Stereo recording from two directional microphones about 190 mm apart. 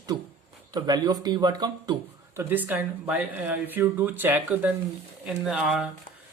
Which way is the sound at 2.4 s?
10° right (ahead or behind).